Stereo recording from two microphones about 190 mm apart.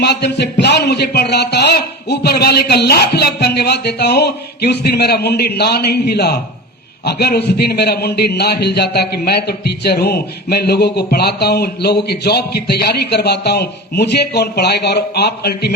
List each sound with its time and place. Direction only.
0.0 s a man's voice: 60° left (ahead or behind)